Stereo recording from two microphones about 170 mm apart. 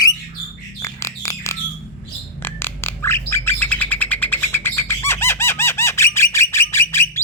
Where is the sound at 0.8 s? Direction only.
15° left (ahead or behind).